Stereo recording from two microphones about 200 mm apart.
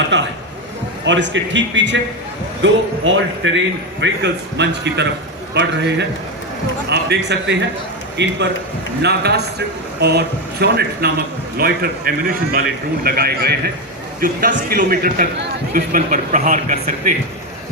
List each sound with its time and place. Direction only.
0.1 s a man's voice: 60° right (ahead or behind); by 17.2 s 40° right (ahead or behind)